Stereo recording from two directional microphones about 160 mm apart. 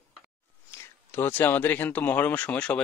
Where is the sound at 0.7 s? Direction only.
15° left (ahead or behind).